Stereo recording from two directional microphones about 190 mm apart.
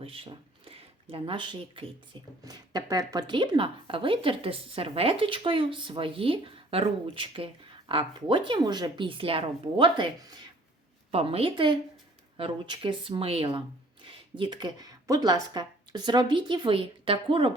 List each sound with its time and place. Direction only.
0.0 s a sound: 30° right (ahead or behind)
1.1 s a woman's voice: 25° right (ahead or behind)
11.1 s a woman's voice: 30° right (ahead or behind)